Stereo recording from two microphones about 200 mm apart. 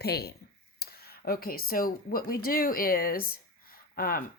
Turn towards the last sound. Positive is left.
turn(degrees=45)  # may be behind; listen again after turning